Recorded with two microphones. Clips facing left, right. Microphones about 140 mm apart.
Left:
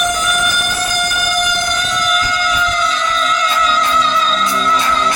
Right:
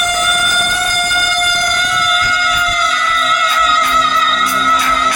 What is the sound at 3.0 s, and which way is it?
Music, 25° left (ahead or behind).